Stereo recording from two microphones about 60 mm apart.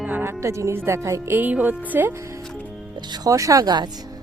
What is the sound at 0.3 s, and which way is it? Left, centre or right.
Speech, right.